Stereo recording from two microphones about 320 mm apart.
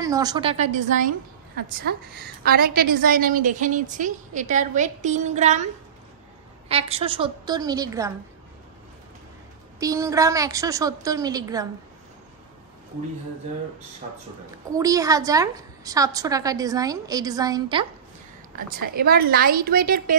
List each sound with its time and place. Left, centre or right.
0.0 s a woman's voice: centre
6.7 s a woman's voice: centre
9.8 s a woman's voice: centre
14.7 s a woman's voice: centre
18.7 s a woman's voice: right